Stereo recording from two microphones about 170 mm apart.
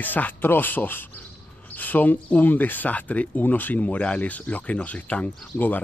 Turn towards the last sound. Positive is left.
turn(degrees=10)  # may be behind; listen again after turning